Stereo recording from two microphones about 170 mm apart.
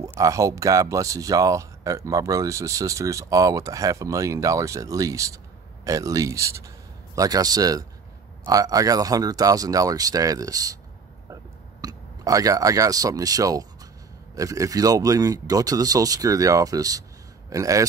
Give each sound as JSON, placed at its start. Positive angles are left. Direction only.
{"t": 0.2, "sound": "speech", "side_deg": -20}
{"t": 11.8, "sound": "speech", "side_deg": -20}